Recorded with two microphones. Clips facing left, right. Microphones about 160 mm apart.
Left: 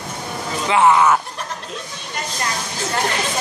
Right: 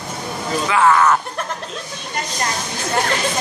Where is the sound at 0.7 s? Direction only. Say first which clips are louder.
Left 1 dB; 20° left (ahead or behind).